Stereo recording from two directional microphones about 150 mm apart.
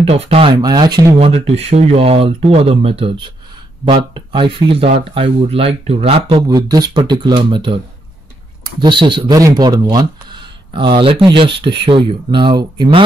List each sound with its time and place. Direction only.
0.0 s speech: 40° right (ahead or behind)
0.6 s speech: 30° right (ahead or behind)
1.3 s speech: 45° right (ahead or behind)
6.4 s speech: 25° right (ahead or behind)